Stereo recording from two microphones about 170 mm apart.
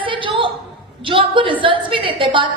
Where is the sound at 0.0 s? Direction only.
30° right (ahead or behind).